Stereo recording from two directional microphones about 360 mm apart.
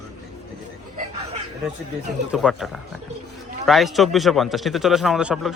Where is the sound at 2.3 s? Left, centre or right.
Centre.